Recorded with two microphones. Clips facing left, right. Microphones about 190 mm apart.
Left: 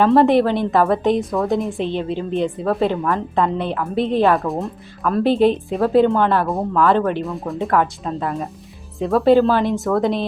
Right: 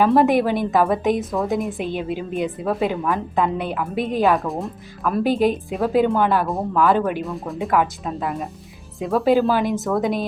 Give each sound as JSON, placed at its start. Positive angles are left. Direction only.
{"t": 0.0, "sound": "a woman's voice", "side_deg": -10}
{"t": 3.9, "sound": "speech", "side_deg": 30}
{"t": 4.2, "sound": "speech", "side_deg": 0}
{"t": 5.1, "sound": "a woman's voice", "side_deg": -10}
{"t": 9.2, "sound": "a woman's voice", "side_deg": -15}